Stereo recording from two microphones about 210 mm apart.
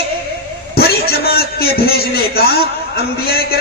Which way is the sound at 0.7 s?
45° left (ahead or behind).